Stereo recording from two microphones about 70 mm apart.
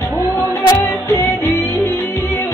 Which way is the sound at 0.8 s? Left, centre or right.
Left.